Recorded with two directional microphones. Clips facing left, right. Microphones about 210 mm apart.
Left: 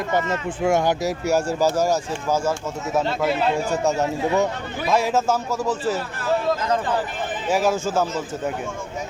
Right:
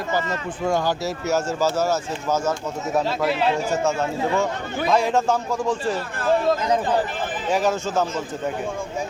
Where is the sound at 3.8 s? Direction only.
15° left (ahead or behind).